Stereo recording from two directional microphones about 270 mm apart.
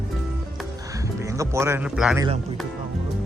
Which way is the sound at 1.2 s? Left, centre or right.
Centre.